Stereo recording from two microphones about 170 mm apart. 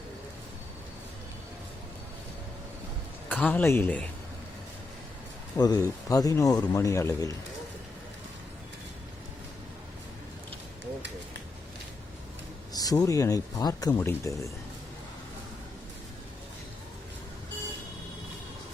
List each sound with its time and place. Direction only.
3.2 s speech: 10° left (ahead or behind)
5.5 s a man's voice: 20° left (ahead or behind)
12.7 s a man's voice: 20° left (ahead or behind)